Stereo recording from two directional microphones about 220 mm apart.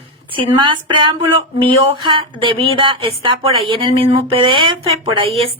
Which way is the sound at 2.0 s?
20° right (ahead or behind).